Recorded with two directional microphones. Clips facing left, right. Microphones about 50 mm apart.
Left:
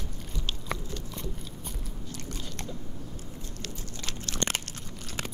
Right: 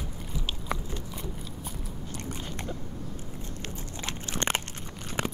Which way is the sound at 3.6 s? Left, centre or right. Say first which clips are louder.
Right 2 dB; right.